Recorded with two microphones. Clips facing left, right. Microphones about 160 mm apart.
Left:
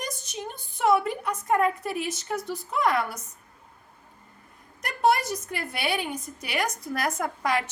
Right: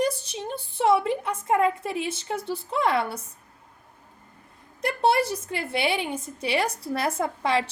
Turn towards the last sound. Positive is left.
turn(degrees=-30)  # may be behind; listen again after turning